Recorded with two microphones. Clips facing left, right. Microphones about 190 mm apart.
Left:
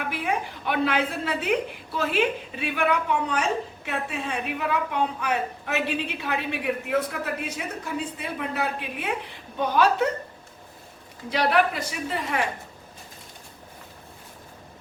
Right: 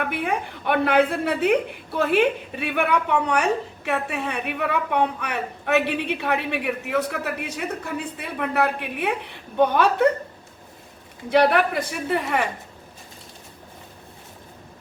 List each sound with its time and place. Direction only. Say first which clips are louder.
0.0 s a woman's voice: right 3 dB; 60° right (ahead or behind)
11.3 s a woman's voice: right 4 dB; 60° right (ahead or behind)